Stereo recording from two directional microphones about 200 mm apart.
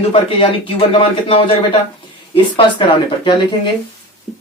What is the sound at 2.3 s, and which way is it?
Speech, 25° left (ahead or behind).